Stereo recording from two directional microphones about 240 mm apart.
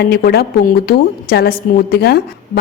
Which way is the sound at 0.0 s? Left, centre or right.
Left.